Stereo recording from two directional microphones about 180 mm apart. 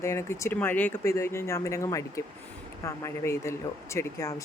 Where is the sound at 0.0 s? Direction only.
15° left (ahead or behind).